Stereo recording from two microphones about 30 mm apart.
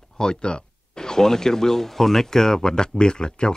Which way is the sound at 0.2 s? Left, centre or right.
Left.